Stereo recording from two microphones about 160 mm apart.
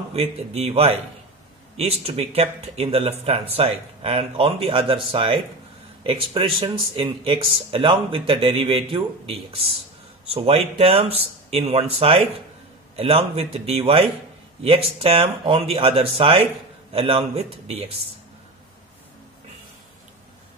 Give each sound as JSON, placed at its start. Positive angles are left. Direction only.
{"t": 0.1, "sound": "speech", "side_deg": -40}